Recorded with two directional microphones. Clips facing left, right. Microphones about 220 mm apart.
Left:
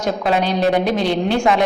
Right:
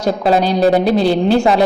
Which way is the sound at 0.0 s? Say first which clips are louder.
Right 4 dB; 35° right (ahead or behind).